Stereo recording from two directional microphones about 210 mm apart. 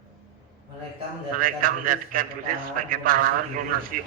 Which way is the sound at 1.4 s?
40° right (ahead or behind).